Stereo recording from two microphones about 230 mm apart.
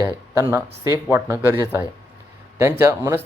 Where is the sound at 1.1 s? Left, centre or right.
Centre.